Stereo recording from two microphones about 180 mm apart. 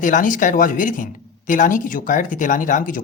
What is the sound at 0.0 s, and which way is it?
A woman's voice, 45° left (ahead or behind).